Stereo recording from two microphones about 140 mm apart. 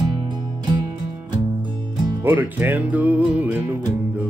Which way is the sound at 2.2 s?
15° right (ahead or behind).